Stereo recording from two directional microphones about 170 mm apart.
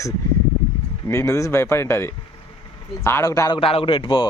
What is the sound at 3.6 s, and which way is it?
Speech, 35° left (ahead or behind).